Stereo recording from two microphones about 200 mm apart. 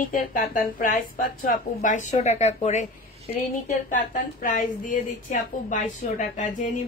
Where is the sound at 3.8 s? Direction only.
40° left (ahead or behind).